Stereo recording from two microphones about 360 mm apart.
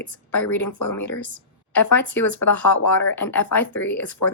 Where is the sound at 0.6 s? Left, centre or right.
Left.